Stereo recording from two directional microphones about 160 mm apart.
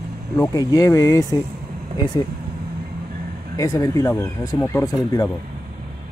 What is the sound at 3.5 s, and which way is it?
Speech, 20° left (ahead or behind).